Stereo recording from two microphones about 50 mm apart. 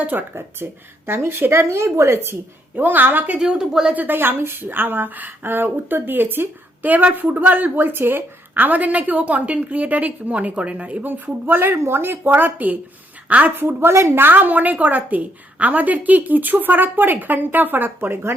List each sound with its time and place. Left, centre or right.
0.0 s a woman's voice: right
0.3 s speech: right
2.7 s a woman's voice: right
3.3 s a woman's voice: centre
3.9 s a woman's voice: right
11.0 s a woman's voice: right
13.6 s a woman's voice: right